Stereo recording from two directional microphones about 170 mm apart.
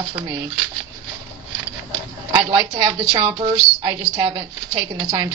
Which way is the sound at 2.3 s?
25° right (ahead or behind).